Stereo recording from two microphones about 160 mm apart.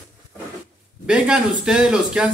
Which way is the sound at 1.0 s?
5° right (ahead or behind).